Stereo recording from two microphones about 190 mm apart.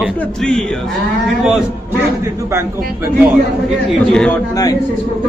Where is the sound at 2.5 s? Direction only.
15° right (ahead or behind).